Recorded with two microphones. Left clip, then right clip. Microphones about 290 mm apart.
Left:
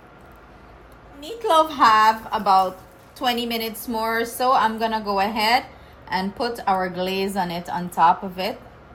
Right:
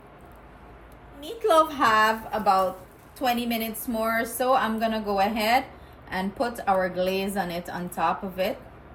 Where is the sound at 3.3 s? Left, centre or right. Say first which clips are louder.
Left 3 dB; left.